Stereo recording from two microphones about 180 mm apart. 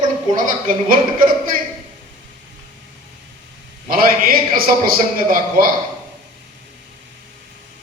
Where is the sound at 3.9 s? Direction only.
50° right (ahead or behind).